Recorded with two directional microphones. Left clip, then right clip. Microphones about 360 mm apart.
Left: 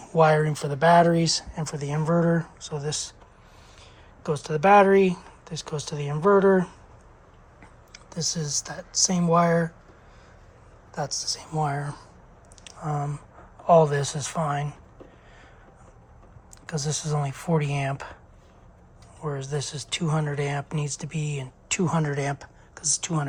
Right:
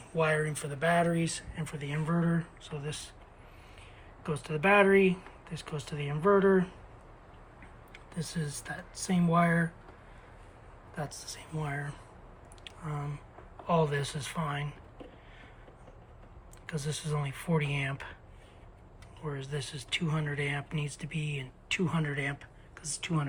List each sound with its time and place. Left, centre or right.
0.1 s speech: centre
4.2 s speech: centre
7.9 s speech: centre
10.9 s speech: centre
12.6 s a sound: centre
13.7 s speech: centre
16.6 s speech: centre
19.2 s speech: centre